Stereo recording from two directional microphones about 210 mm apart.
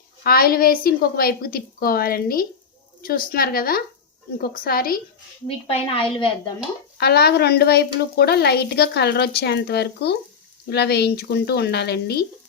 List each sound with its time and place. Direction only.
0.2 s a woman's voice: 45° left (ahead or behind)
5.5 s a woman's voice: 25° left (ahead or behind)
7.0 s a woman's voice: 50° left (ahead or behind)